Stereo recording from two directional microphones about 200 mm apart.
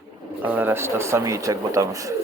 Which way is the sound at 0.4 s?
10° right (ahead or behind).